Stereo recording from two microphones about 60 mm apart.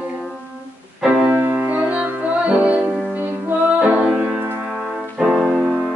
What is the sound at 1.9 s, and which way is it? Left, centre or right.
Music, right.